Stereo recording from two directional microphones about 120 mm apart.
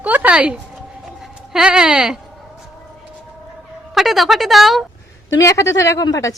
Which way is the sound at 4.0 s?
Centre (ahead or behind).